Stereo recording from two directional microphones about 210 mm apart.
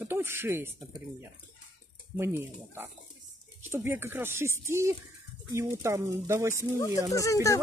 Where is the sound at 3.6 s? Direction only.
10° right (ahead or behind).